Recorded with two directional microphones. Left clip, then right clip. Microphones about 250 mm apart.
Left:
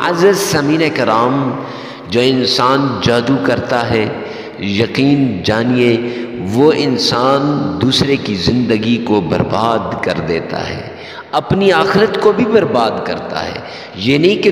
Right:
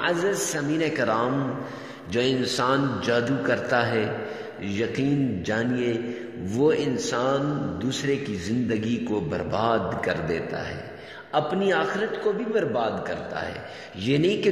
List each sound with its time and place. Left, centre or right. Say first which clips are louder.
0.0 s a man's voice: left 13 dB; left